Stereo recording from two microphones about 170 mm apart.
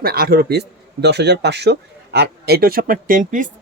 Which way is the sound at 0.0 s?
60° right (ahead or behind).